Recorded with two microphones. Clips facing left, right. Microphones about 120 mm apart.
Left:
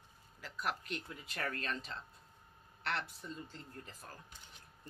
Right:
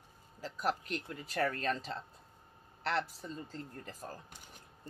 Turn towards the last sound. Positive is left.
turn(degrees=-40)  # may be behind; listen again after turning